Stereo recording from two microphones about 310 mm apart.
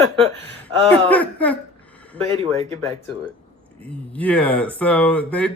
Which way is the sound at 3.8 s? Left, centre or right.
Centre.